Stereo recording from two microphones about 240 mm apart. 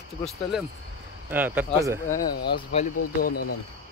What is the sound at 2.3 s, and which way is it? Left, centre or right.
Speech, left.